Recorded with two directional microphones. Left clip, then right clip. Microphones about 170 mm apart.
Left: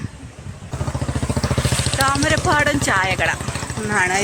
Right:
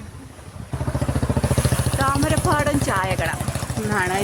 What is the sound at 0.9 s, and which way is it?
Vehicle, 45° left (ahead or behind).